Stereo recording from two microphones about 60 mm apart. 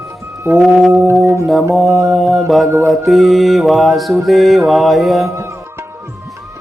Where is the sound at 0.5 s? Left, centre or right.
Centre.